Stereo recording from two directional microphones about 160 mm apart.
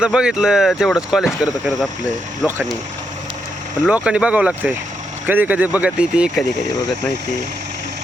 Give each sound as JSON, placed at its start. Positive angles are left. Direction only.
{"t": 0.0, "sound": "speech", "side_deg": -5}
{"t": 3.8, "sound": "speech", "side_deg": -5}